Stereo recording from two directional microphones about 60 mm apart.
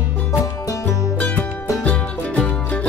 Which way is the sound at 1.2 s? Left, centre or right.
Left.